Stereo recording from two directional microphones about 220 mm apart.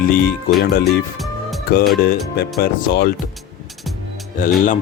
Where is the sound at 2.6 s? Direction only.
45° left (ahead or behind).